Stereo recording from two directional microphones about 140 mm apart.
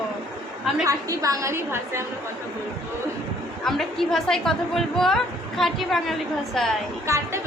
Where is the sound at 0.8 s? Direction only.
25° right (ahead or behind).